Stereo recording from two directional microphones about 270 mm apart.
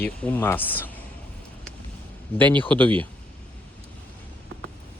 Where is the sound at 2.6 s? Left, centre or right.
Centre.